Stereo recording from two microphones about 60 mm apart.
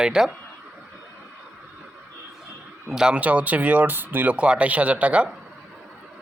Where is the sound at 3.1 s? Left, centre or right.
Right.